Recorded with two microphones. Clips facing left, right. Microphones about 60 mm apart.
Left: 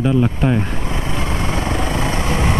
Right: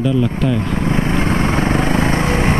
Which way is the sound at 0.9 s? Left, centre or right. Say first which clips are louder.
Right 6 dB; right.